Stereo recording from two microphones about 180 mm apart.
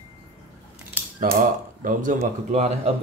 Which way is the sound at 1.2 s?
50° right (ahead or behind).